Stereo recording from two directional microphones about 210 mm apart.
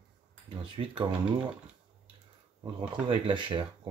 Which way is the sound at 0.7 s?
25° right (ahead or behind).